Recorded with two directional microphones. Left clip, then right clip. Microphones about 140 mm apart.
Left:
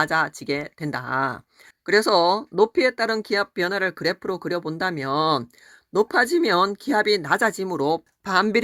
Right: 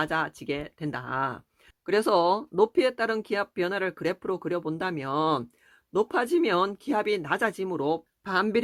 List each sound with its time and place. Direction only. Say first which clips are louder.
0.0 s speech: left 6 dB; 45° left (ahead or behind)